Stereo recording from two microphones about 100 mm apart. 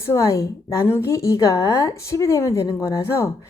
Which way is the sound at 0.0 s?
30° left (ahead or behind).